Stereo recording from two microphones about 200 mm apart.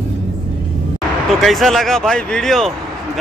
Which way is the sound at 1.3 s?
Centre (ahead or behind).